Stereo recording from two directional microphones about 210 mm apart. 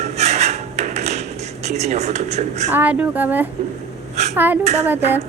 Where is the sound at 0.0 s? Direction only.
30° right (ahead or behind).